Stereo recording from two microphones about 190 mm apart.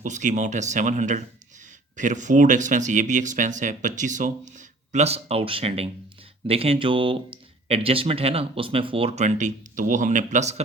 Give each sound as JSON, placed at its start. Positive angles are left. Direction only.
{"t": 0.0, "sound": "speech", "side_deg": -40}